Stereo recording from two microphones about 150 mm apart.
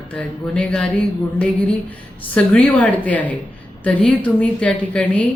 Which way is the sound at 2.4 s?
10° left (ahead or behind).